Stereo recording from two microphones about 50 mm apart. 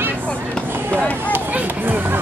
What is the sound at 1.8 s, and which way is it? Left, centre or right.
Chatter, right.